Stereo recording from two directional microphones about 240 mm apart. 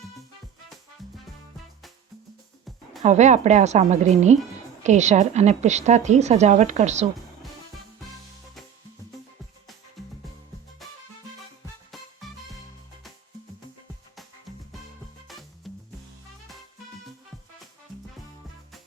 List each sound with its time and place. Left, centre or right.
3.0 s a woman's voice: right
10.0 s music: centre
15.3 s music: centre